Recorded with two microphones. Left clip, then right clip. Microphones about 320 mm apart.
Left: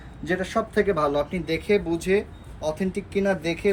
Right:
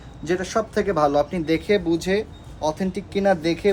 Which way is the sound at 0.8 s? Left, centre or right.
Centre.